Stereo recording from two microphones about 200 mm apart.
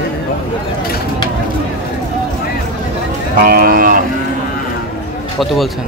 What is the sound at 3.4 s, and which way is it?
Speech, 45° right (ahead or behind).